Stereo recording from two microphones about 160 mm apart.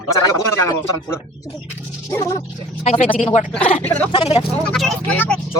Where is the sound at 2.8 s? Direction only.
45° left (ahead or behind).